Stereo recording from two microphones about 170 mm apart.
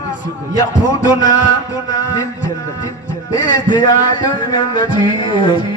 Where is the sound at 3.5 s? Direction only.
25° left (ahead or behind).